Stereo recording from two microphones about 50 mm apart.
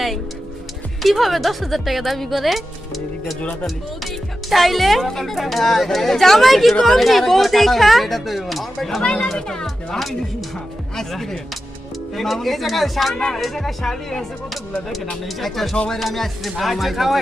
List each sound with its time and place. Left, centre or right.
1.0 s speech: centre
4.0 s speech: centre
9.0 s speech: centre